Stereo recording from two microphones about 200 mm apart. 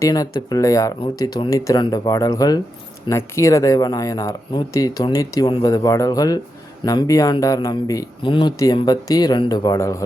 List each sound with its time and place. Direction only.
0.0 s a man's voice: 20° left (ahead or behind)